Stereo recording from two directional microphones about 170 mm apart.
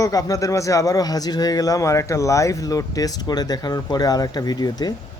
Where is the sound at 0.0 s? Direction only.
20° left (ahead or behind).